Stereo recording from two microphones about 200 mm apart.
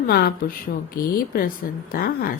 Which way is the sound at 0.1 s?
50° left (ahead or behind).